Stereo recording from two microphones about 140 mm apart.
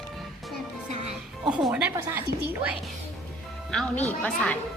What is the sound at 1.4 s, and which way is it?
Speech, 5° right (ahead or behind).